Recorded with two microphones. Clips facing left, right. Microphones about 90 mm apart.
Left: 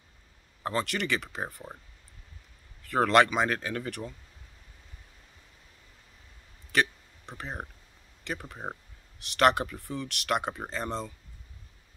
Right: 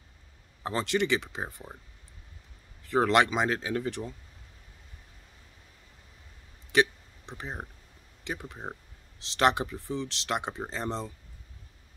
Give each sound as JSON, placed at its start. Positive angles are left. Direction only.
{"t": 0.7, "sound": "speech", "side_deg": -20}
{"t": 2.8, "sound": "speech", "side_deg": -20}
{"t": 6.7, "sound": "speech", "side_deg": -20}
{"t": 8.2, "sound": "speech", "side_deg": -20}